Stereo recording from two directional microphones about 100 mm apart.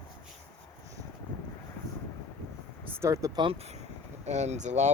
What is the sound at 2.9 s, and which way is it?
Speech, 30° right (ahead or behind).